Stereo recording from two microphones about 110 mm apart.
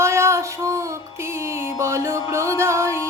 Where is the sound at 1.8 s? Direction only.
25° right (ahead or behind).